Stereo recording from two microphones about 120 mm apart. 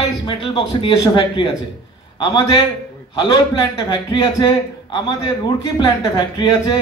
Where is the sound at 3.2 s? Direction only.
40° left (ahead or behind).